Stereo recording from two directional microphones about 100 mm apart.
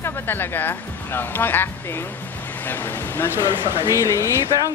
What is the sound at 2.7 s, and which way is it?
Speech, 25° left (ahead or behind).